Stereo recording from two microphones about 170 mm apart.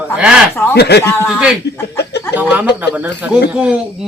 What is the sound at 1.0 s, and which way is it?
Speech, 15° left (ahead or behind).